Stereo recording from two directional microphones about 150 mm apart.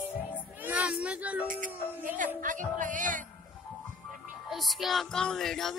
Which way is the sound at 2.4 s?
60° right (ahead or behind).